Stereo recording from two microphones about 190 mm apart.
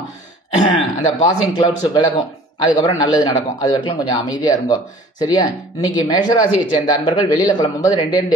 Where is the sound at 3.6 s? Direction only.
20° left (ahead or behind).